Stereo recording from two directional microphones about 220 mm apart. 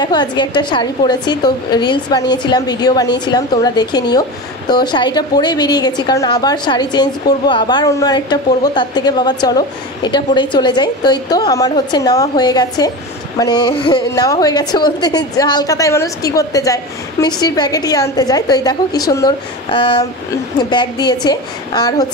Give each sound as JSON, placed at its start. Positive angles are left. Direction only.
{"t": 0.0, "sound": "a woman's voice", "side_deg": 20}